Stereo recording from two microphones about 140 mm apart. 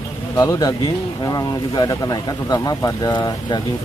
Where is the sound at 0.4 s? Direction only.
30° left (ahead or behind).